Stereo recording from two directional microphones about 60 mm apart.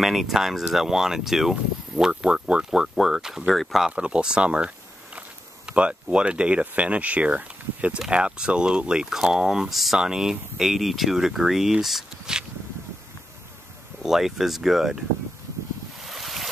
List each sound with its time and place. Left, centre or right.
0.0 s speech: centre
3.9 s speech: centre
14.0 s speech: centre
16.0 s waves: centre